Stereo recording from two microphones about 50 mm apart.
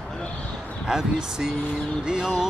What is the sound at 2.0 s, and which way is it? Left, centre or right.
Music, centre.